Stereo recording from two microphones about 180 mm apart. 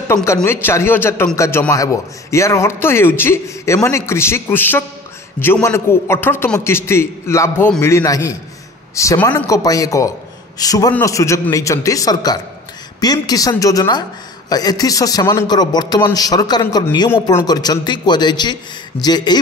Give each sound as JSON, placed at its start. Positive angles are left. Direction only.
{"t": 0.1, "sound": "a man's voice", "side_deg": 15}